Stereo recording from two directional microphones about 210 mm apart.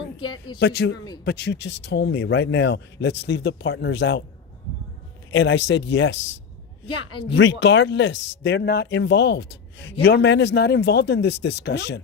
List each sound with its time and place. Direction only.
0.6 s a man's voice: 50° left (ahead or behind)
5.3 s speech: 60° left (ahead or behind)
6.8 s speech: 25° left (ahead or behind)
7.3 s speech: 60° left (ahead or behind)